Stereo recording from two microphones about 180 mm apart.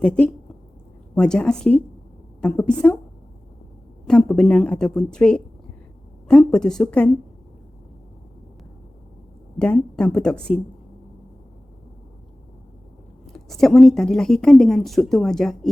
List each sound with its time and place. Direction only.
0.0 s a woman's voice: 5° left (ahead or behind)
4.0 s a woman's voice: 5° left (ahead or behind)
9.6 s a woman's voice: 5° left (ahead or behind)
13.2 s a woman's voice: centre (ahead or behind)